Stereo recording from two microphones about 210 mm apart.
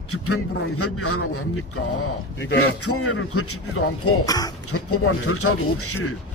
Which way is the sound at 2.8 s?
90° left.